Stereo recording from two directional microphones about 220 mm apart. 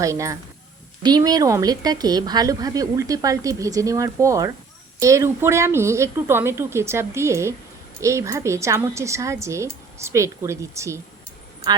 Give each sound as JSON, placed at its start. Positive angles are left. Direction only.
{"t": 0.0, "sound": "a woman's voice", "side_deg": -15}